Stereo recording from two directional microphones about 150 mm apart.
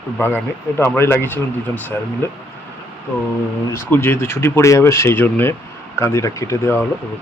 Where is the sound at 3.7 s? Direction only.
15° left (ahead or behind).